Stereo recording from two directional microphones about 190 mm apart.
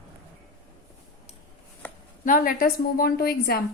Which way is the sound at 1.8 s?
10° left (ahead or behind).